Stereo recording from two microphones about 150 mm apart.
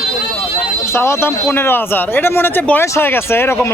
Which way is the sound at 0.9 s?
15° left (ahead or behind).